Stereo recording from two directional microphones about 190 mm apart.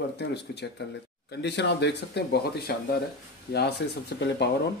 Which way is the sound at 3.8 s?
70° left (ahead or behind).